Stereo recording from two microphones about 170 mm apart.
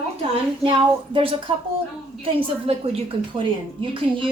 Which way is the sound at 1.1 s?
30° right (ahead or behind).